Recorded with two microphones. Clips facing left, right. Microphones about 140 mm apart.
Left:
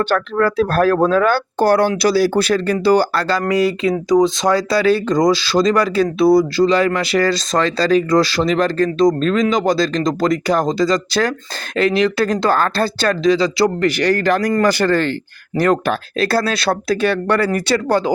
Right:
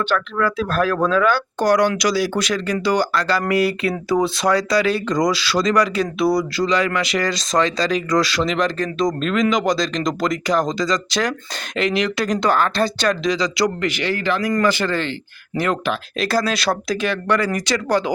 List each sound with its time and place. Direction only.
0.1 s speech: 40° left (ahead or behind)